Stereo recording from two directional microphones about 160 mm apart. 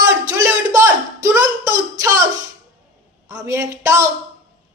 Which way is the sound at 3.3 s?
15° right (ahead or behind).